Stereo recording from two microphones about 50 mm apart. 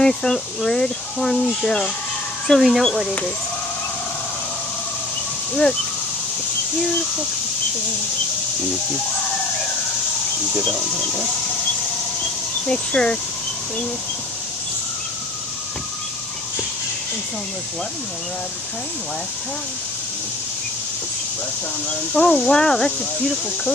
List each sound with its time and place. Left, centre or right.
0.0 s speech: centre
5.5 s speech: centre
12.6 s speech: centre
22.1 s speech: left